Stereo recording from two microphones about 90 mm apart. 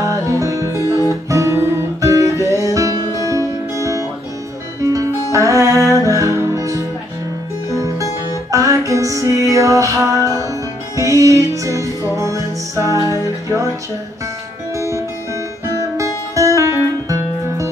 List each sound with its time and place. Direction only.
0.0 s music: 35° right (ahead or behind)
0.8 s music: 40° left (ahead or behind)
1.3 s music: 35° right (ahead or behind)
4.8 s music: 40° right (ahead or behind)
8.5 s music: 35° right (ahead or behind)
14.8 s music: 35° right (ahead or behind)
16.3 s music: 35° right (ahead or behind)